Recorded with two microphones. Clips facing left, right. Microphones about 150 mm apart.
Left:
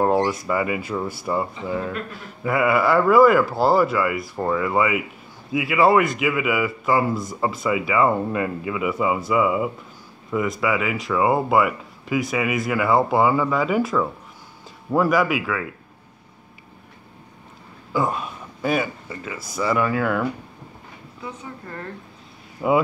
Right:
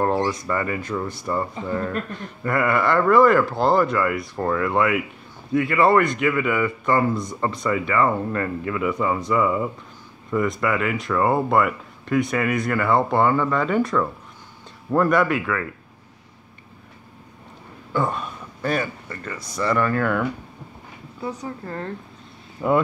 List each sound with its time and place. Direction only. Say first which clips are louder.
0.0 s speech: left 2 dB; 10° left (ahead or behind)
17.9 s speech: left 1 dB; 5° left (ahead or behind)
21.2 s speech: right 5 dB; 35° right (ahead or behind)
22.6 s speech: left 1 dB; 15° left (ahead or behind)